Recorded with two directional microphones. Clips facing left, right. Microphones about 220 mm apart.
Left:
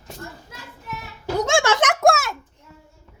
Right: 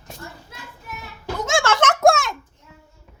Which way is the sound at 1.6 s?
15° left (ahead or behind).